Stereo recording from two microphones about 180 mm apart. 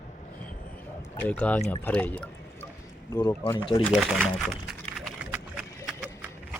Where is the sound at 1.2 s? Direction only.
10° left (ahead or behind).